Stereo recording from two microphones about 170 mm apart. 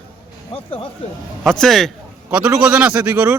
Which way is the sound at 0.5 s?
30° left (ahead or behind).